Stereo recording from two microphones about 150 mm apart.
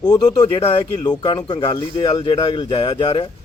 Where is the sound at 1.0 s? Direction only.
30° left (ahead or behind).